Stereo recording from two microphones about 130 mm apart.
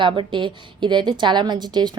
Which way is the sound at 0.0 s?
40° right (ahead or behind).